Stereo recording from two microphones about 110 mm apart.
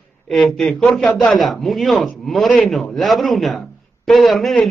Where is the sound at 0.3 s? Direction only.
5° left (ahead or behind).